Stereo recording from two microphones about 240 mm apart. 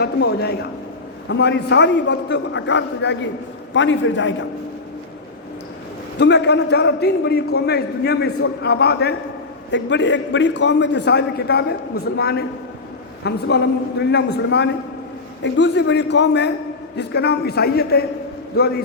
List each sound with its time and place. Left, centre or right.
0.0 s a man's voice: left
6.1 s a man's voice: left